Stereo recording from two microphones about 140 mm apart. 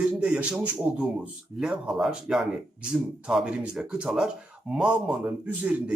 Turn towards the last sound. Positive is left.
turn(degrees=-10)  # may be behind; listen again after turning